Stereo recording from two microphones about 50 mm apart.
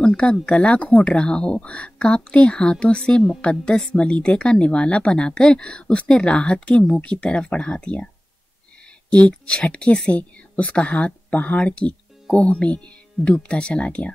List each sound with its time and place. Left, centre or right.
0.0 s a woman's voice: centre
9.3 s a woman's voice: left